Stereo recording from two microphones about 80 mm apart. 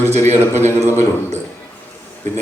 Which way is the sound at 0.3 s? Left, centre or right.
Right.